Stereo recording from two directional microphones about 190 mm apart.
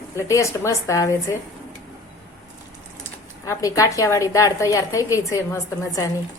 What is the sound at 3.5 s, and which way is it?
A woman's voice, 15° left (ahead or behind).